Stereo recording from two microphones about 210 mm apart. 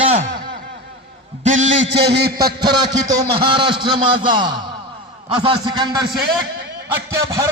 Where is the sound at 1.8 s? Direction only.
55° right (ahead or behind).